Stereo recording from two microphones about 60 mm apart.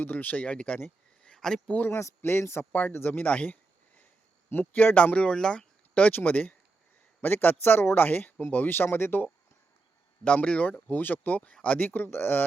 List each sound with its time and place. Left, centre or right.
0.0 s speech: left
1.2 s a sound: centre
1.6 s speech: left
2.0 s speech: left
2.7 s speech: left
3.2 s a sound: left
4.7 s speech: left
5.1 s speech: centre; by 9.3 s left
10.2 s speech: left
11.8 s speech: left